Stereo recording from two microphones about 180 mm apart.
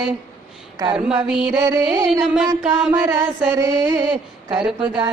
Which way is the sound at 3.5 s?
20° right (ahead or behind).